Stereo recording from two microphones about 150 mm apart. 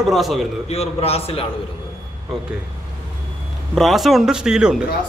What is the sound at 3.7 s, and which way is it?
A man's voice, centre (ahead or behind).